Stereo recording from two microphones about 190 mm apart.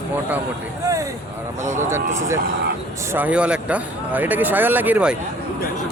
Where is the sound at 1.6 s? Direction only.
40° right (ahead or behind).